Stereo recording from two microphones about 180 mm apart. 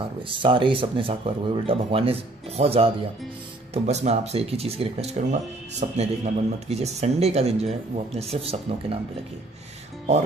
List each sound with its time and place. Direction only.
0.3 s speech: 30° right (ahead or behind)